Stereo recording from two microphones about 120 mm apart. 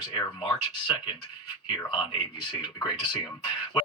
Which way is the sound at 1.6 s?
45° left (ahead or behind).